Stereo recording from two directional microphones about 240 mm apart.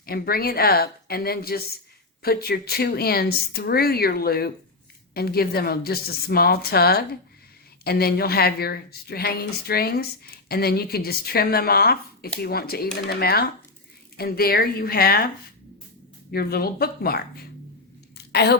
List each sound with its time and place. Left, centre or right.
0.0 s a woman's voice: left
16.3 s a woman's voice: left
18.3 s a sound: left